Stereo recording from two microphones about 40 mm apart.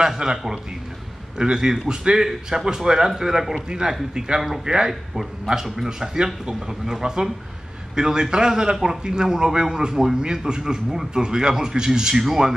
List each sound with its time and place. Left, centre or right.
0.2 s a man's voice: right
1.4 s a man's voice: centre